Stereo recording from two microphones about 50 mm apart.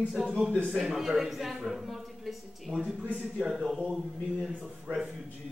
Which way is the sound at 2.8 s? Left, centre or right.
Right.